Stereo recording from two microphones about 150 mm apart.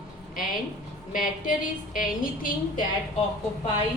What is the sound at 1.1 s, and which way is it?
A woman's voice, 65° left (ahead or behind).